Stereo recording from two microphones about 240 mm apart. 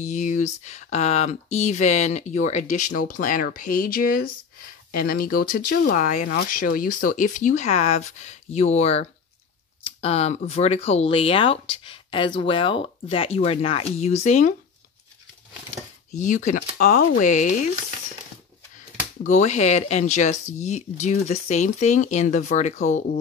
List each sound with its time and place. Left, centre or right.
0.0 s speech: left
16.1 s speech: left
19.2 s speech: left